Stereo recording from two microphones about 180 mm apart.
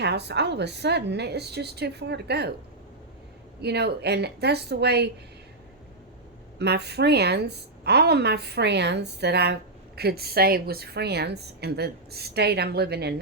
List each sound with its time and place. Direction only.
0.0 s speech: 70° right (ahead or behind)
3.6 s a woman's voice: 65° right (ahead or behind)
6.6 s a woman's voice: 65° right (ahead or behind)